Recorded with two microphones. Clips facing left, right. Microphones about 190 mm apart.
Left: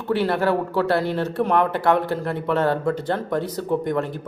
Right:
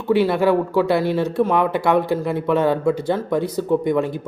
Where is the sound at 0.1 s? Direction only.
10° right (ahead or behind).